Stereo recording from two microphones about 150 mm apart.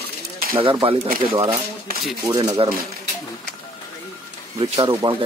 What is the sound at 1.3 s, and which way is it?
Speech, 20° right (ahead or behind).